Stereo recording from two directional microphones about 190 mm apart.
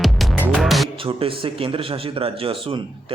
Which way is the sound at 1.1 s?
30° right (ahead or behind).